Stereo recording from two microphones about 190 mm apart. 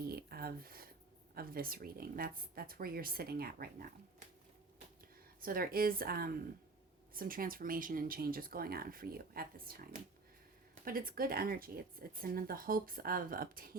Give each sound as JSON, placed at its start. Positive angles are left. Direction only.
{"t": 0.0, "sound": "a sound", "side_deg": -55}
{"t": 1.4, "sound": "speech", "side_deg": -50}
{"t": 5.4, "sound": "speech", "side_deg": -50}